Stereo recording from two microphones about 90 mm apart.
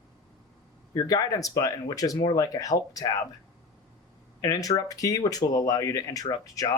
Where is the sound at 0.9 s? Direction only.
45° left (ahead or behind).